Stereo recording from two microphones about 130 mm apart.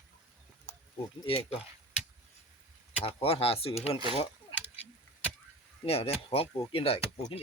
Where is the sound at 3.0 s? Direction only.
45° left (ahead or behind).